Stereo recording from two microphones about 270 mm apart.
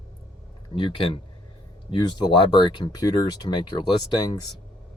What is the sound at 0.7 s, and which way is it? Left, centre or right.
Speech, centre.